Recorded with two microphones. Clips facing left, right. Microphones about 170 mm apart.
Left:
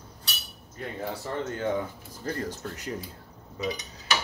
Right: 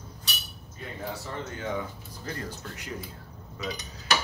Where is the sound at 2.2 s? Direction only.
45° left (ahead or behind).